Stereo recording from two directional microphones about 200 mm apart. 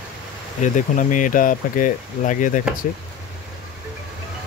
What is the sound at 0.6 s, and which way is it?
Speech, 40° left (ahead or behind).